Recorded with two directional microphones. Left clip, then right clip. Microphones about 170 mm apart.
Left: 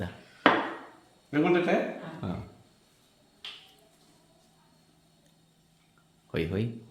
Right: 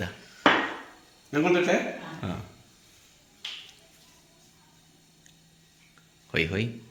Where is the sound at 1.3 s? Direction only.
25° left (ahead or behind).